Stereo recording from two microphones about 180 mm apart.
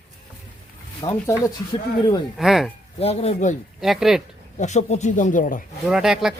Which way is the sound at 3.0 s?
35° left (ahead or behind).